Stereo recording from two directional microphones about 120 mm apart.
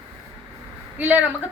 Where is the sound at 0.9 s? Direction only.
15° right (ahead or behind).